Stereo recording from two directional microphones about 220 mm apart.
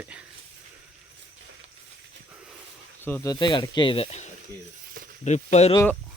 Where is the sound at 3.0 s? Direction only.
15° left (ahead or behind); by 5.7 s 30° left (ahead or behind).